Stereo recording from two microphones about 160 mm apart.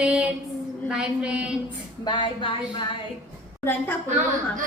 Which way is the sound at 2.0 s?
30° left (ahead or behind).